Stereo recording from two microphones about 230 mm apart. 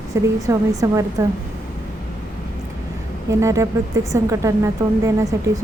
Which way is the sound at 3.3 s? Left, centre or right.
Centre.